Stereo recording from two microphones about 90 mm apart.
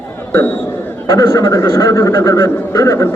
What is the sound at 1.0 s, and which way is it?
A man's voice, 40° left (ahead or behind).